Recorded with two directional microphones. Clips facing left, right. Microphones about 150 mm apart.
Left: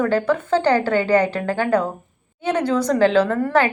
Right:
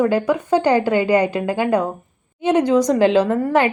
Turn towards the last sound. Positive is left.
turn(degrees=-15)  # may be behind; listen again after turning